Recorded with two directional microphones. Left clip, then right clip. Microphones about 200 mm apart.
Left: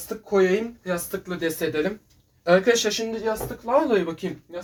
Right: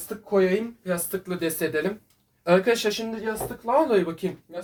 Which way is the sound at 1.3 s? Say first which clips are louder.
Left 1 dB; 30° right (ahead or behind).